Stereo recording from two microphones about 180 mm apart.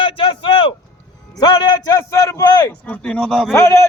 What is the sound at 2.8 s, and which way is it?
Speech, 5° left (ahead or behind).